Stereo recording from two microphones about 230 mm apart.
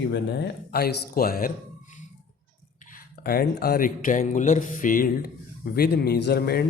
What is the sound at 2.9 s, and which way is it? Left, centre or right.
Speech, left.